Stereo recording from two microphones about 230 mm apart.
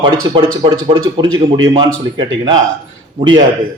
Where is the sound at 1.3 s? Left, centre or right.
Right.